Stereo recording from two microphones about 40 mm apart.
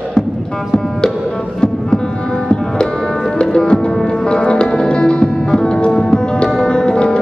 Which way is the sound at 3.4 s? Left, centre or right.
Left.